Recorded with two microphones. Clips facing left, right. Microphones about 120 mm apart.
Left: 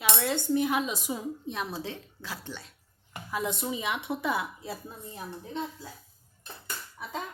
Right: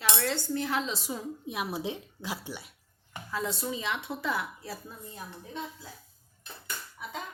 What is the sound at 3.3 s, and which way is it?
A woman's voice, 15° left (ahead or behind).